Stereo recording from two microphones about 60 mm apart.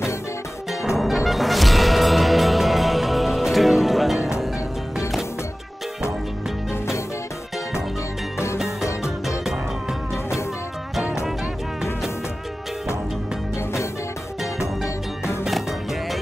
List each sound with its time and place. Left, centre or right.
0.9 s music: centre
8.6 s music: left
9.4 s music: centre
15.4 s music: centre